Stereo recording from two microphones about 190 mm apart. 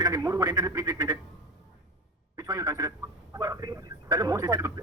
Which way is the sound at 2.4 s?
20° right (ahead or behind).